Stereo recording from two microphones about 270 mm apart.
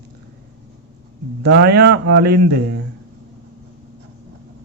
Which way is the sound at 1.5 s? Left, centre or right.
Right.